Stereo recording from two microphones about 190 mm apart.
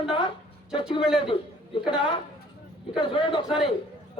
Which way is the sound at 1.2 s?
25° left (ahead or behind).